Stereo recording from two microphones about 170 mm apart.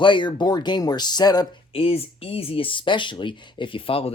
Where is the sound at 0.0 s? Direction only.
30° left (ahead or behind).